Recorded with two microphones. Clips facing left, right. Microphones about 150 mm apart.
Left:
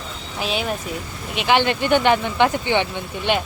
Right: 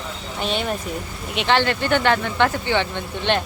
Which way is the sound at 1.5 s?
15° left (ahead or behind).